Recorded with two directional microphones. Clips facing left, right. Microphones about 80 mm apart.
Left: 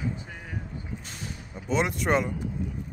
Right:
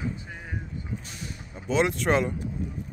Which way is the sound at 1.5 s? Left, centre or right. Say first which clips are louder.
Right 2 dB; centre.